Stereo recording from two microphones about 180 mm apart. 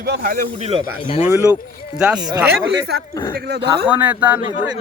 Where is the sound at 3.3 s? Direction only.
60° right (ahead or behind).